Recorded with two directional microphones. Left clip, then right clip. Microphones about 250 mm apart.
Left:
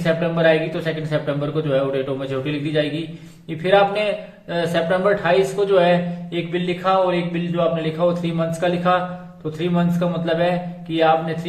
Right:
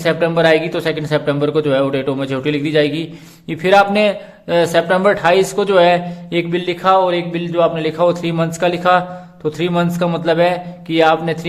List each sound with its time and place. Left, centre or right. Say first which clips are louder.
0.0 s a man's voice: right 4 dB; right